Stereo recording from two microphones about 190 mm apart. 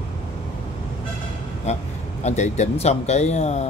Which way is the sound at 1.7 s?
35° left (ahead or behind).